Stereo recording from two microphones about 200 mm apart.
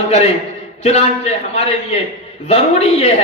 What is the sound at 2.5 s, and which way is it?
Speech, 30° left (ahead or behind).